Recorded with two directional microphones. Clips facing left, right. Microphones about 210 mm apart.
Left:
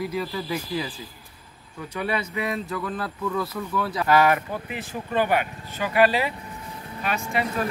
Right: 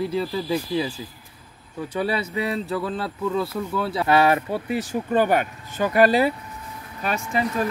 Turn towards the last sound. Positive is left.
turn(degrees=-35)  # may be behind; listen again after turning